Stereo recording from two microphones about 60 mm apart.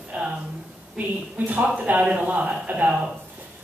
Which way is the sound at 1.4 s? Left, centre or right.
Right.